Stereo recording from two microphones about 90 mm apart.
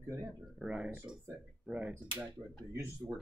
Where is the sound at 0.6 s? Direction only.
10° right (ahead or behind).